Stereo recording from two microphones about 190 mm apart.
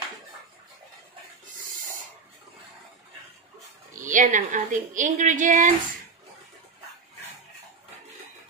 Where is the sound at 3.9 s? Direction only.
40° right (ahead or behind).